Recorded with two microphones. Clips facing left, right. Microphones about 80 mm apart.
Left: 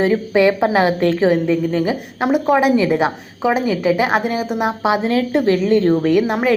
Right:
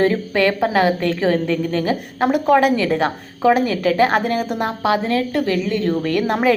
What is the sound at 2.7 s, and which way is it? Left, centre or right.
A woman's voice, centre.